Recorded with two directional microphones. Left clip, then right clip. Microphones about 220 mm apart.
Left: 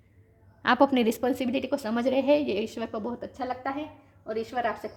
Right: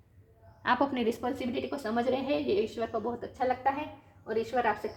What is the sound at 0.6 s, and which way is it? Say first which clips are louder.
A woman's voice: left 5 dB; 45° left (ahead or behind).